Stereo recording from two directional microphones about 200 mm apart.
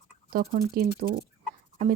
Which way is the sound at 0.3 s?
45° right (ahead or behind).